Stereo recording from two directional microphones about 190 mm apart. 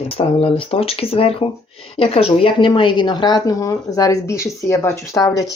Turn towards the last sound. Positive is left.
turn(degrees=15)  # may be behind; listen again after turning